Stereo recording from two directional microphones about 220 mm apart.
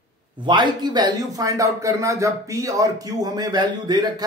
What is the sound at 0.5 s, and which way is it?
A man's voice, 20° right (ahead or behind).